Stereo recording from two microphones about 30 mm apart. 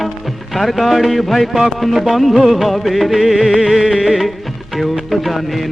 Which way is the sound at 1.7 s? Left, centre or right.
Centre.